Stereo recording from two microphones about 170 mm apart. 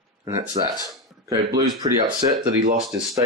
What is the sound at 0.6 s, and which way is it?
Speech, 30° right (ahead or behind).